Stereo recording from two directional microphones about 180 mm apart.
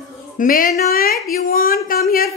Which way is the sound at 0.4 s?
50° left (ahead or behind).